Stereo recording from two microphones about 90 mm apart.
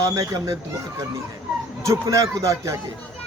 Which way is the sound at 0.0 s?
40° right (ahead or behind).